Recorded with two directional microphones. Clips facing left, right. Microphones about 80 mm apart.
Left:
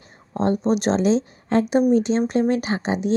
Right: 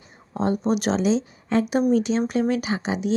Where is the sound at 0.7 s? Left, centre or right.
Left.